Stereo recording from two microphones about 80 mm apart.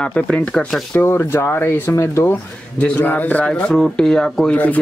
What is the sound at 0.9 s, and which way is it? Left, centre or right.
Speech, left.